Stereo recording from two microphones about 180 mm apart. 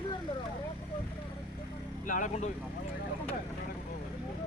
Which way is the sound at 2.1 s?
45° left (ahead or behind).